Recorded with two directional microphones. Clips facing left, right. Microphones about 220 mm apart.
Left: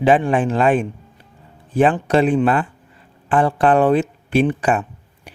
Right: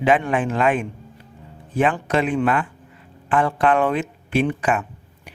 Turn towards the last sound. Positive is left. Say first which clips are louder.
# left 3 dB
turn(degrees=30)  # may be behind; listen again after turning